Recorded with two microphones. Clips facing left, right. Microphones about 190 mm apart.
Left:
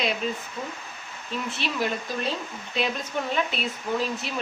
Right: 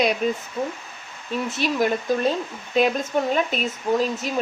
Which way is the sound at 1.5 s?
45° right (ahead or behind).